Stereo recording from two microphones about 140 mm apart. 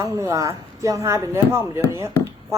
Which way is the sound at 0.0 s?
25° right (ahead or behind).